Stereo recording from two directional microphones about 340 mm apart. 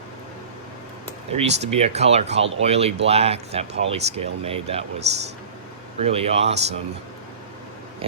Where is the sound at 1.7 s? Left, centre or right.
Centre.